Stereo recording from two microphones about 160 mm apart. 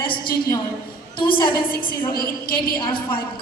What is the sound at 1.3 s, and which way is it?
A woman's voice, 65° left (ahead or behind).